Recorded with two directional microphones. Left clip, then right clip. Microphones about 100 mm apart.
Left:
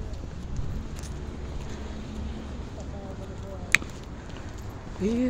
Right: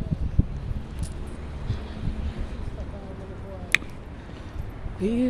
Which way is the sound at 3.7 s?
20° right (ahead or behind).